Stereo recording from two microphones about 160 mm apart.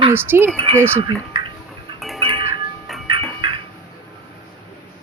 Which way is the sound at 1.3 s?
30° right (ahead or behind).